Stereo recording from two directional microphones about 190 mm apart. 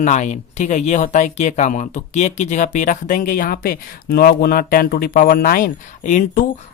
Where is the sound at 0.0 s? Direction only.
40° left (ahead or behind).